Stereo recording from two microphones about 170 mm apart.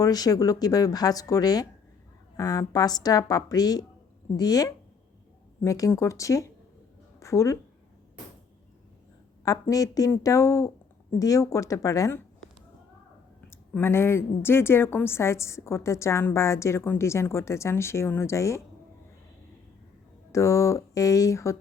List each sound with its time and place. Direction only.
0.0 s speech: 20° left (ahead or behind)
9.4 s speech: 20° left (ahead or behind)
13.5 s a woman's voice: 15° left (ahead or behind)
20.3 s a woman's voice: 15° left (ahead or behind)